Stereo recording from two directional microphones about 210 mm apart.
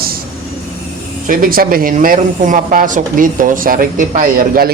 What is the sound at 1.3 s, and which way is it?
Speech, 45° right (ahead or behind).